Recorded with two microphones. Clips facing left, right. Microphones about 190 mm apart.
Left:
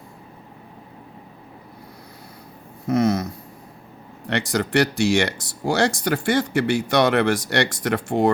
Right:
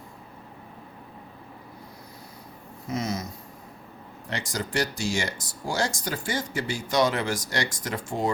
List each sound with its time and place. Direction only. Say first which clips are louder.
2.8 s speech: left 10 dB; 60° left (ahead or behind)
4.3 s speech: left 9 dB; 70° left (ahead or behind)